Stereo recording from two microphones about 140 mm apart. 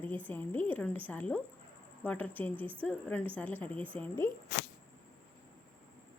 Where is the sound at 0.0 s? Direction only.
15° left (ahead or behind).